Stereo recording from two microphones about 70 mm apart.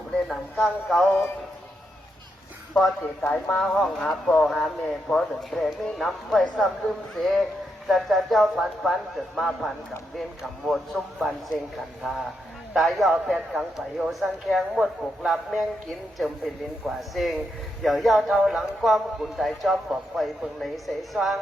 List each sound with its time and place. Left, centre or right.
0.6 s a man's voice: centre
3.2 s speech: left
3.6 s a man's voice: centre
3.8 s speech: centre
4.1 s a man's voice: centre